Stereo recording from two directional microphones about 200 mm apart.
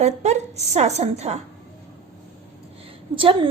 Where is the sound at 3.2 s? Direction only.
25° right (ahead or behind).